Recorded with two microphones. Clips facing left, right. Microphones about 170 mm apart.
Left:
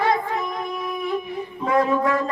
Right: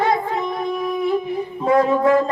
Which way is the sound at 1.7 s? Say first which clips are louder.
Right 5 dB; 30° right (ahead or behind).